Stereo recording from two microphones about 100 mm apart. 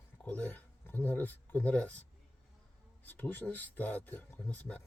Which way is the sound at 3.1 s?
20° left (ahead or behind).